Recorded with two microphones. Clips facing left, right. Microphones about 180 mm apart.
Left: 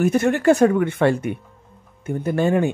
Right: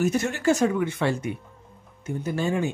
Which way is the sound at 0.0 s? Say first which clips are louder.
Left 6 dB; 55° left (ahead or behind).